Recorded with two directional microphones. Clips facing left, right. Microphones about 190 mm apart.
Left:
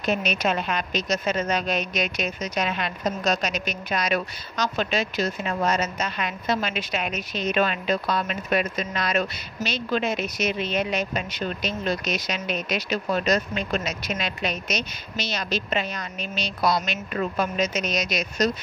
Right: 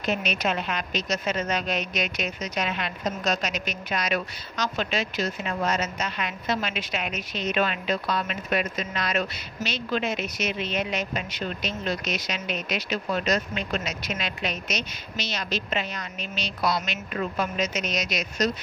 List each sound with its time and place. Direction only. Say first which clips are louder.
0.0 s a woman's voice: left 2 dB; 45° left (ahead or behind)